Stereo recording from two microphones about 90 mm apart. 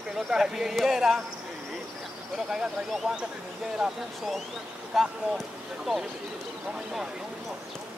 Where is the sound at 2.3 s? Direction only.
5° right (ahead or behind).